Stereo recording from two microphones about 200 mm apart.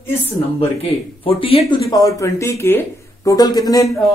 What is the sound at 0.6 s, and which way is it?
Speech, 30° left (ahead or behind).